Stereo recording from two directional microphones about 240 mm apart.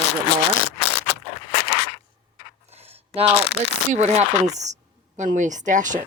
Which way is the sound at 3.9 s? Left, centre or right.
Right.